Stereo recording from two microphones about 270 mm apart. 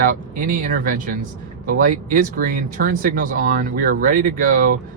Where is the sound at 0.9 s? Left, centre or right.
Right.